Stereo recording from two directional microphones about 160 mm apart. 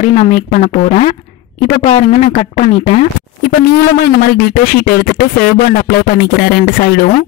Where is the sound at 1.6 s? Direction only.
35° left (ahead or behind).